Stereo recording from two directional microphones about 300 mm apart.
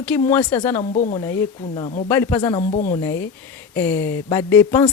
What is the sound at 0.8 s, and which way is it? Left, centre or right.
Speech, left.